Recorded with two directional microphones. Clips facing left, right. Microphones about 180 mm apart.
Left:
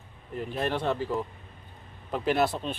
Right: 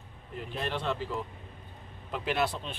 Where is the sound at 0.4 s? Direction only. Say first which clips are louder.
Left 5 dB; 45° left (ahead or behind).